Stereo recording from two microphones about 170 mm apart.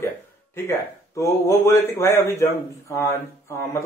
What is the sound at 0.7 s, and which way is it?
Speech, 15° left (ahead or behind).